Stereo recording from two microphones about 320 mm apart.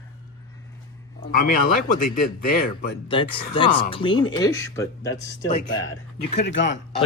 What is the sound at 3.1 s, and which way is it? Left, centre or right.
Speech, centre.